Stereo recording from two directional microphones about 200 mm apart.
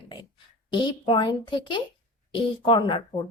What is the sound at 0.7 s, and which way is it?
A woman's voice, 20° left (ahead or behind).